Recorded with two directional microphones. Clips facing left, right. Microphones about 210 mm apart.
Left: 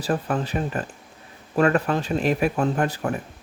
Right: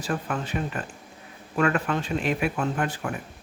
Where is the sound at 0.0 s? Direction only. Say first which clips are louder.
Left 5 dB; 35° left (ahead or behind).